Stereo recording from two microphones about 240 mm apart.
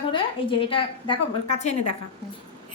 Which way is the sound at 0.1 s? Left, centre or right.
Left.